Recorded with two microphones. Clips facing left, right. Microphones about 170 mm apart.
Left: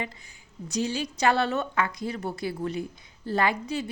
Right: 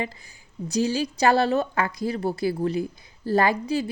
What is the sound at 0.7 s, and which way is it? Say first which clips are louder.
A woman's voice: right 5 dB; 35° right (ahead or behind).